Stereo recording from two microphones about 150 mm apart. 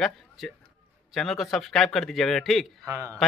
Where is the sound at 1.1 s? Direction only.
Centre (ahead or behind).